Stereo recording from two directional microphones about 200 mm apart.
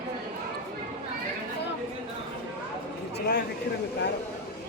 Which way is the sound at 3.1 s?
55° left (ahead or behind).